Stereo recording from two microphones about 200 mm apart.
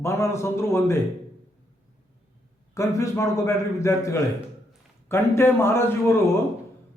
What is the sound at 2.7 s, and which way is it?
A man's voice, 15° left (ahead or behind).